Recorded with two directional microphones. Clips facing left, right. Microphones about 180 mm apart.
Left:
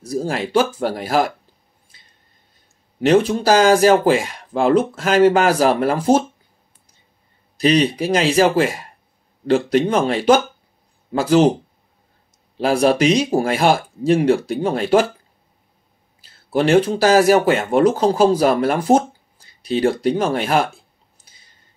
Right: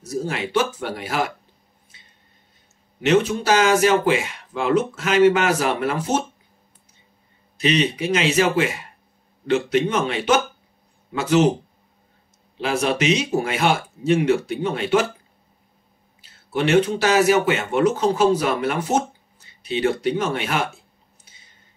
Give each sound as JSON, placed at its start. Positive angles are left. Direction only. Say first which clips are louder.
{"t": 0.1, "sound": "speech", "louder": "left 4 dB", "side_deg": 35}
{"t": 3.4, "sound": "speech", "louder": "left 6 dB", "side_deg": 35}
{"t": 7.6, "sound": "speech", "louder": "left 4 dB", "side_deg": 35}
{"t": 12.5, "sound": "speech", "louder": "left 6 dB", "side_deg": 40}
{"t": 16.5, "sound": "speech", "louder": "left 3 dB", "side_deg": 35}